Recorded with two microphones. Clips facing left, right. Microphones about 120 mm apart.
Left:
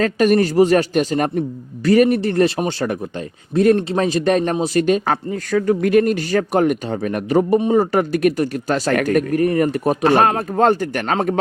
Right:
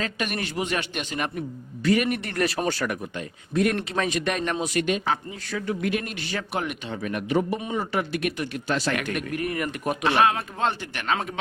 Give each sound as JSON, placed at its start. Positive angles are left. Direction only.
{"t": 0.0, "sound": "a man's voice", "side_deg": 40}